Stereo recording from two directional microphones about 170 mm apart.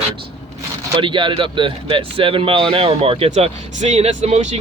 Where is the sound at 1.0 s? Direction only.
30° right (ahead or behind).